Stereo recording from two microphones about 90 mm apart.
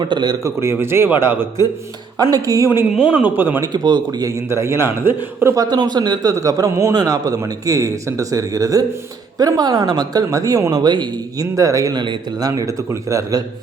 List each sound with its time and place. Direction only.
0.0 s speech: 55° right (ahead or behind)
0.4 s a man's voice: 30° right (ahead or behind)
2.3 s a man's voice: 40° right (ahead or behind)
2.9 s a man's voice: 15° right (ahead or behind)
3.6 s speech: 50° right (ahead or behind)
4.3 s a man's voice: 30° right (ahead or behind)
5.5 s a man's voice: 50° right (ahead or behind)
11.5 s a man's voice: 40° right (ahead or behind)